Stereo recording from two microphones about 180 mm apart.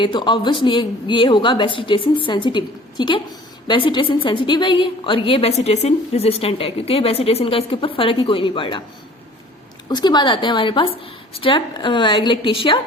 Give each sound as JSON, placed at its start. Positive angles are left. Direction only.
{"t": 0.0, "sound": "a woman's voice", "side_deg": 25}
{"t": 9.9, "sound": "a woman's voice", "side_deg": 25}